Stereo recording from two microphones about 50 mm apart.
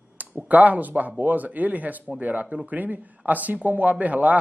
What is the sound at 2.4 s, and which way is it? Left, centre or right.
Speech, centre.